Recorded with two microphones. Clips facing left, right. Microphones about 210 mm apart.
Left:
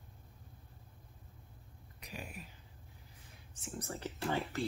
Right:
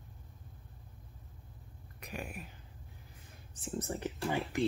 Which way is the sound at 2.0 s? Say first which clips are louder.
Right 5 dB; 55° right (ahead or behind).